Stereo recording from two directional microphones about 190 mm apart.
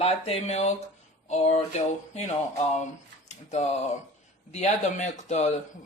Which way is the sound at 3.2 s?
35° left (ahead or behind).